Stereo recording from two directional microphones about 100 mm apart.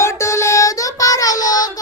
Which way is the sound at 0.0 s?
25° left (ahead or behind).